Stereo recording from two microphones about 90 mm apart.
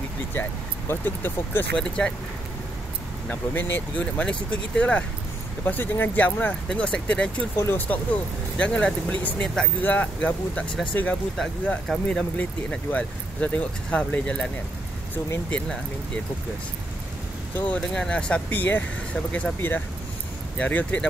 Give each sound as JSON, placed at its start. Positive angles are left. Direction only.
{"t": 0.3, "sound": "speech", "side_deg": 25}
{"t": 1.8, "sound": "speech", "side_deg": 10}
{"t": 3.3, "sound": "speech", "side_deg": 20}
{"t": 7.5, "sound": "speech", "side_deg": 25}
{"t": 17.6, "sound": "speech", "side_deg": 15}